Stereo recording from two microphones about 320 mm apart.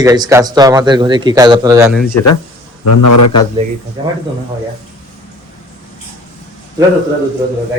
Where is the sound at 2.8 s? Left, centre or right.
Left.